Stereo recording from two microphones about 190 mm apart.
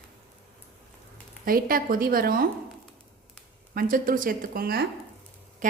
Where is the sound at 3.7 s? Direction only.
50° right (ahead or behind).